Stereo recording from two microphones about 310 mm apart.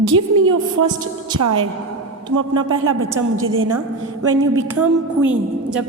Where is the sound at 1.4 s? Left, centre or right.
Right.